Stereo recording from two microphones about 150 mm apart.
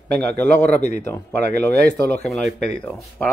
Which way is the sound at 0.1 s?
10° left (ahead or behind).